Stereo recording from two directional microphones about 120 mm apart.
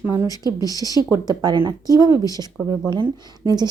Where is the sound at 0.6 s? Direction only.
30° right (ahead or behind).